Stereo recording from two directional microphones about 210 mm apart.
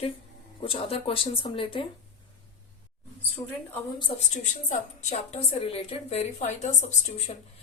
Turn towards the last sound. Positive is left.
turn(degrees=35)  # may be behind; listen again after turning